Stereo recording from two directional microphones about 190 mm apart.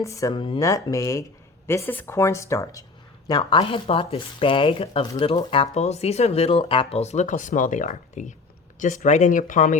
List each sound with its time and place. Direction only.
0.0 s speech: 15° left (ahead or behind); by 9.7 s 45° left (ahead or behind)